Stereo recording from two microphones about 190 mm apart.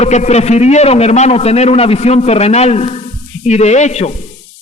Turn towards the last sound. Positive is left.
turn(degrees=35)  # may be behind; listen again after turning